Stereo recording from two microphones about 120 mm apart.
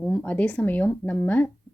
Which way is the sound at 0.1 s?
10° left (ahead or behind).